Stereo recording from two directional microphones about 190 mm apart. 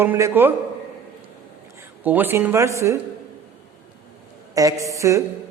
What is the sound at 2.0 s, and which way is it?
A man's voice, 10° right (ahead or behind).